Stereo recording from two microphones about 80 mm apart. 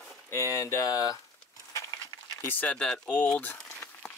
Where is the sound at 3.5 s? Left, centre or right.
Left.